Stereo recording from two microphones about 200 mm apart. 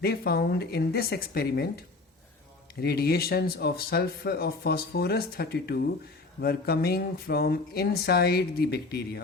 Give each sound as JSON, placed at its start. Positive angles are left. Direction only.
{"t": 0.0, "sound": "speech", "side_deg": 50}
{"t": 2.8, "sound": "speech", "side_deg": 50}